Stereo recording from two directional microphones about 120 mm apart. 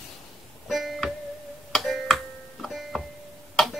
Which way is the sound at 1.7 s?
Centre (ahead or behind).